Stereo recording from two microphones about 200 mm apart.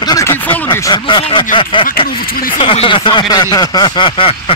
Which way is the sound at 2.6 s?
25° left (ahead or behind).